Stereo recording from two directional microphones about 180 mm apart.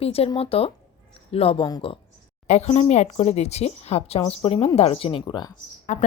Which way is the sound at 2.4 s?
35° left (ahead or behind).